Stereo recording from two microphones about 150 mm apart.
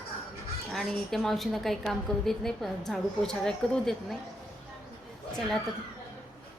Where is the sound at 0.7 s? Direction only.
Centre (ahead or behind).